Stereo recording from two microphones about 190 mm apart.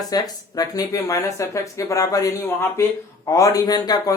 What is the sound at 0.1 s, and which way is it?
Speech, 20° left (ahead or behind).